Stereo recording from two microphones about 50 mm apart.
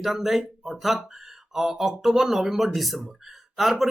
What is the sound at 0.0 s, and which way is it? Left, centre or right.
Speech, centre.